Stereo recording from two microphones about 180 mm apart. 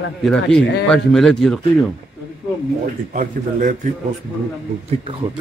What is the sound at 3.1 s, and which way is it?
Speech, 45° right (ahead or behind).